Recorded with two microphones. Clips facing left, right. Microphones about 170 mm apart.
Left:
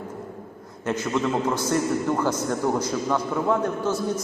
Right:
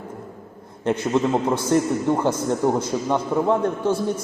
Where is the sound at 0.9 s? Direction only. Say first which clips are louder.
Right 4 dB; 30° right (ahead or behind).